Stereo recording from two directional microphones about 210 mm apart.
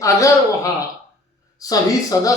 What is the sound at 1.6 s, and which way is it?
Speech, 15° left (ahead or behind).